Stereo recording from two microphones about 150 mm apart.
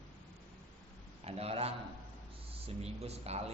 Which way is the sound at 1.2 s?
40° right (ahead or behind).